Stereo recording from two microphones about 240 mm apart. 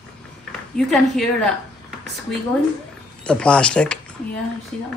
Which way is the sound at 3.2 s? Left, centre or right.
Centre.